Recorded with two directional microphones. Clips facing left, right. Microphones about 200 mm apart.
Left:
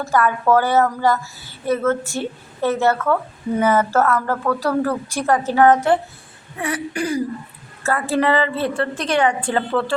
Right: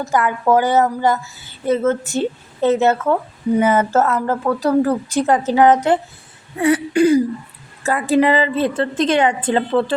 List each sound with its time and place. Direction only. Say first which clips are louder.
0.0 s a woman's voice: even; 20° right (ahead or behind)